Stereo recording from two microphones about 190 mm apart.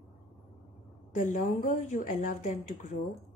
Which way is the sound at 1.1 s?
45° left (ahead or behind).